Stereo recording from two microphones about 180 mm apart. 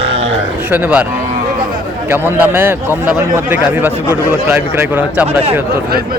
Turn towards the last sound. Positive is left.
turn(degrees=-10)  # may be behind; listen again after turning